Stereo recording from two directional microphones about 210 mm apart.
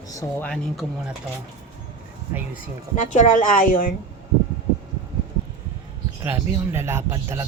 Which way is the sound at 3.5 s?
40° left (ahead or behind).